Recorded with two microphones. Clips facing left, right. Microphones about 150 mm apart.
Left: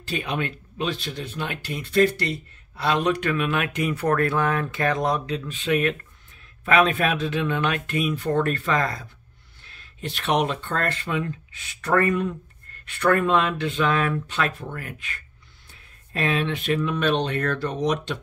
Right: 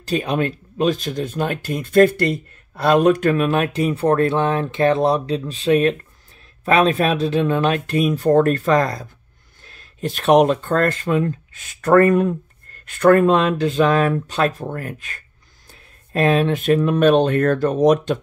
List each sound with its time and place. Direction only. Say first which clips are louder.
0.0 s speech: right 7 dB; 40° right (ahead or behind)